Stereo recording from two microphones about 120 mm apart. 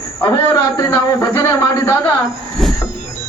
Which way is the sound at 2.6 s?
Centre (ahead or behind).